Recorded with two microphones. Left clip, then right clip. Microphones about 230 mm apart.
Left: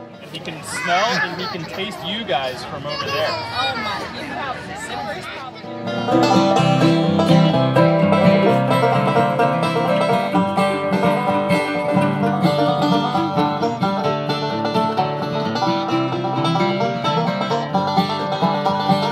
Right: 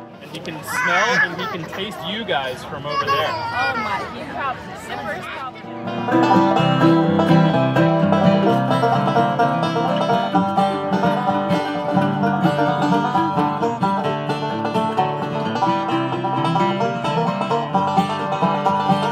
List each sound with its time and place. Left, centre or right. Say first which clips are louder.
5.9 s music: even; left